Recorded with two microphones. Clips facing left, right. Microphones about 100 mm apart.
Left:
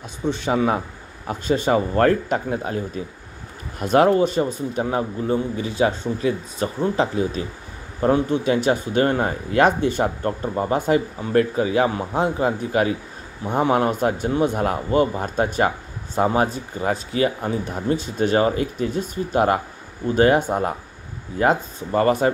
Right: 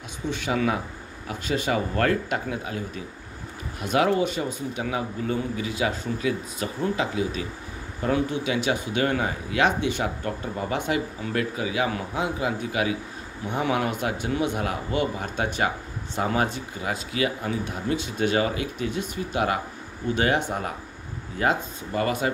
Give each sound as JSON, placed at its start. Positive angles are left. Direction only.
{"t": 0.3, "sound": "speech", "side_deg": 30}
{"t": 3.8, "sound": "speech", "side_deg": 40}